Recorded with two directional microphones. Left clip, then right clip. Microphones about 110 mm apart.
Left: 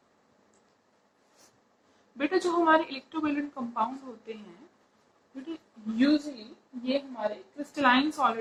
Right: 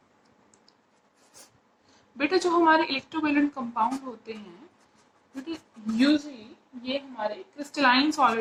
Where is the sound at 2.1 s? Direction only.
25° right (ahead or behind).